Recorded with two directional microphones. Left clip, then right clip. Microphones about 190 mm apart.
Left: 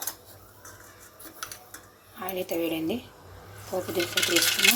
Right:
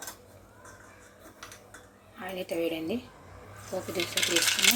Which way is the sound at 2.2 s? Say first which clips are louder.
Left 2 dB; 15° left (ahead or behind).